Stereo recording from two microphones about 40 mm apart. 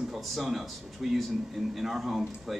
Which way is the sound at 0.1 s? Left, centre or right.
Centre.